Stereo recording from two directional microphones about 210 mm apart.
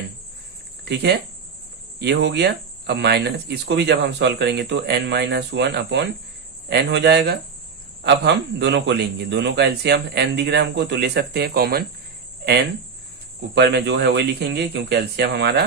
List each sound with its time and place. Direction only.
0.9 s speech: 50° right (ahead or behind)
13.6 s speech: 55° right (ahead or behind)